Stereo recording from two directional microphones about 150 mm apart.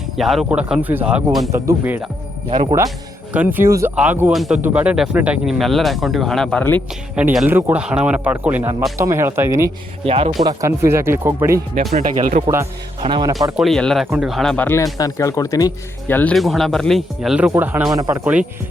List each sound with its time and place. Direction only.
0.2 s speech: centre (ahead or behind)
1.5 s speech: 20° right (ahead or behind)
3.3 s speech: 10° right (ahead or behind); by 6.8 s 10° left (ahead or behind)
7.2 s speech: 10° right (ahead or behind)
10.0 s speech: 40° right (ahead or behind)
10.3 s speech: 20° right (ahead or behind)
11.7 s speech: 60° right (ahead or behind)
13.0 s speech: 30° right (ahead or behind)
13.6 s speech: 5° left (ahead or behind); by 15.7 s 25° left (ahead or behind)
16.0 s speech: 10° left (ahead or behind); by 17.9 s 10° right (ahead or behind)
17.9 s speech: 20° right (ahead or behind)